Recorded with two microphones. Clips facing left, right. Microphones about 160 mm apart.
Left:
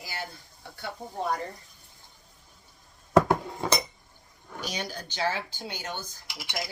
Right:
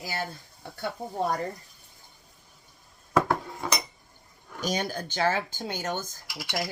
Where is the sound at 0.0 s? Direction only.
45° right (ahead or behind).